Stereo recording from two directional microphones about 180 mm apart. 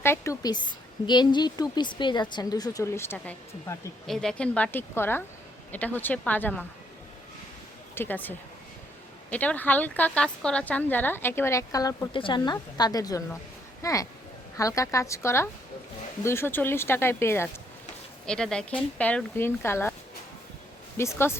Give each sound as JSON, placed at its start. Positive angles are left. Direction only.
{"t": 0.0, "sound": "a sound", "side_deg": 15}
{"t": 1.0, "sound": "a woman's voice", "side_deg": 25}
{"t": 4.0, "sound": "a woman's voice", "side_deg": 0}
{"t": 7.9, "sound": "a woman's voice", "side_deg": 10}
{"t": 20.9, "sound": "a woman's voice", "side_deg": 15}